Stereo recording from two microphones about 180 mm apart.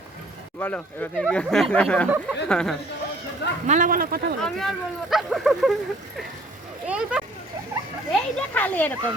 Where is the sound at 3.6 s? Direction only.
45° right (ahead or behind).